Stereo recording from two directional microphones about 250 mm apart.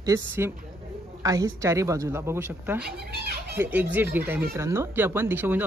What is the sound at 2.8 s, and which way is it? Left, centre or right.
Speech, right.